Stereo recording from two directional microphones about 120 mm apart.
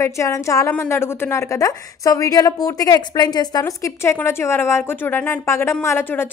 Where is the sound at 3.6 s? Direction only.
25° left (ahead or behind).